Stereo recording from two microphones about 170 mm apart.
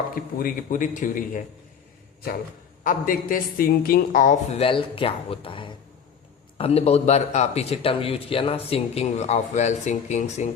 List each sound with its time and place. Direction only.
0.1 s a woman's voice: 55° left (ahead or behind)
2.8 s a woman's voice: 55° left (ahead or behind)
4.6 s a man's voice: 30° left (ahead or behind)